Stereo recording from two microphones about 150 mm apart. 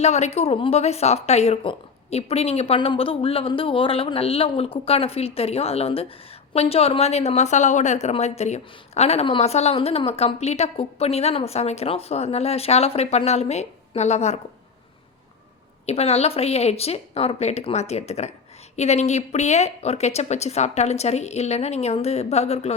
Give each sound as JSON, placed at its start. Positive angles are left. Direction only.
{"t": 0.0, "sound": "a woman's voice", "side_deg": 45}
{"t": 15.9, "sound": "a woman's voice", "side_deg": 45}